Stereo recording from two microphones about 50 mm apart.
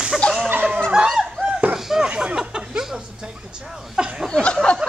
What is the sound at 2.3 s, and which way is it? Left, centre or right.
Speech, centre.